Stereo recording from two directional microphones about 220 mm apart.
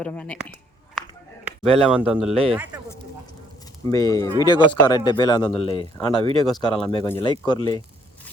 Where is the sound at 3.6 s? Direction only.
15° left (ahead or behind).